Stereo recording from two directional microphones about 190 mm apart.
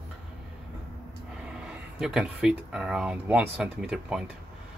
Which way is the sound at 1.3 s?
5° right (ahead or behind).